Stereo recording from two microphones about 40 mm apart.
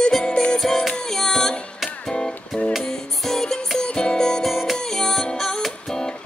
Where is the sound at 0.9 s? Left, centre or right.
Centre.